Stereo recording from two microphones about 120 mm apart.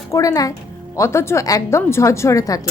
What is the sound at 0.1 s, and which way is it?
Speech, 30° left (ahead or behind).